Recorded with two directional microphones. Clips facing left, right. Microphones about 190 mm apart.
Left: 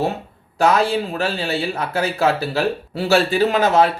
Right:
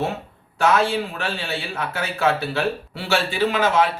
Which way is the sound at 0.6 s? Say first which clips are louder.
Left 2 dB; 35° left (ahead or behind).